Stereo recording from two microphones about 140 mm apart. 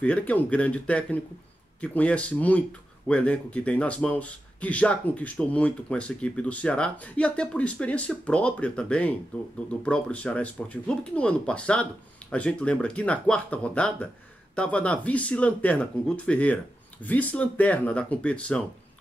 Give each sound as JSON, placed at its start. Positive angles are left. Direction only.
{"t": 0.0, "sound": "speech", "side_deg": 10}